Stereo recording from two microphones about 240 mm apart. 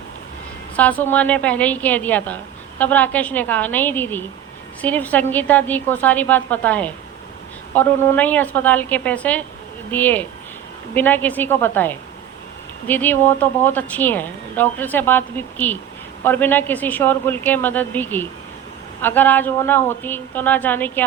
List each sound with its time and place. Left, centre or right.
0.8 s a woman's voice: centre